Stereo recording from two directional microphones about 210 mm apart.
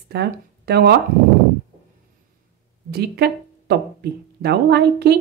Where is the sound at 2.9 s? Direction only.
50° right (ahead or behind).